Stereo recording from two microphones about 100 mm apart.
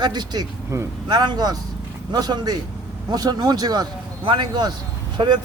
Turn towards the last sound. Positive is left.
turn(degrees=-50)  # may be behind; listen again after turning